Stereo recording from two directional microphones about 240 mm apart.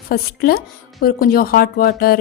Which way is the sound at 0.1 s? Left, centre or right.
Left.